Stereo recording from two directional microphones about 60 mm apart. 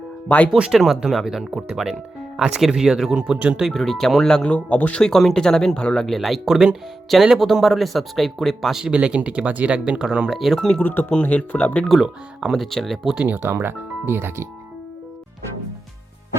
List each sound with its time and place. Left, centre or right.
0.3 s speech: left
0.5 s speech: centre
3.3 s speech: right
3.6 s speech: centre; by 5.0 s left
5.0 s speech: centre
6.1 s speech: centre
8.9 s speech: centre
10.8 s speech: left
11.1 s speech: left
11.9 s speech: centre
13.1 s speech: right